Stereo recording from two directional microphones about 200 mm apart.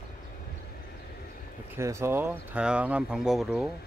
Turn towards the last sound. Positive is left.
turn(degrees=-5)  # may be behind; listen again after turning